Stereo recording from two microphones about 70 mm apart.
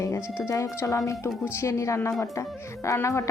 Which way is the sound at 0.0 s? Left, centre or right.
Left.